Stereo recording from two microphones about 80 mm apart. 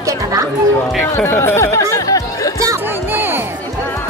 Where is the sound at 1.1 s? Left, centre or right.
Left.